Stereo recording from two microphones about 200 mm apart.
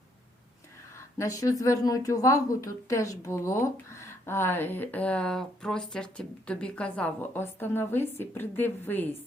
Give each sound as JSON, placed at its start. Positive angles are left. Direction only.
{"t": 1.2, "sound": "a woman's voice", "side_deg": 15}